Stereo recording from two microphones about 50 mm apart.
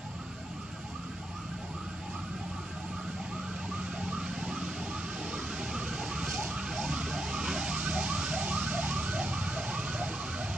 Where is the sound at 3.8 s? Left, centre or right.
Centre.